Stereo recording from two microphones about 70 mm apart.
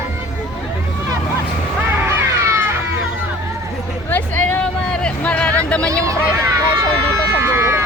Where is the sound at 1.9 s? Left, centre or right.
Right.